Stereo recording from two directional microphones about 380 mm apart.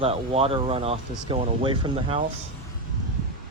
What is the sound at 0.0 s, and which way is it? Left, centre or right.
Speech, centre.